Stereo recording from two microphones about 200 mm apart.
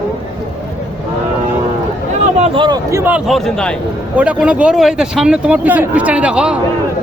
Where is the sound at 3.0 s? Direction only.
5° right (ahead or behind).